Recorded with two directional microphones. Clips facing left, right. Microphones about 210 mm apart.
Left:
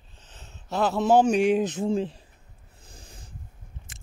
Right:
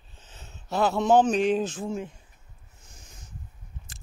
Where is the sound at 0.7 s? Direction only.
Centre (ahead or behind); by 1.9 s 20° left (ahead or behind).